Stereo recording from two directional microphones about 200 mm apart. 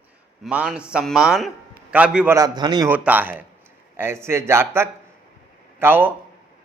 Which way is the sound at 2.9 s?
10° right (ahead or behind).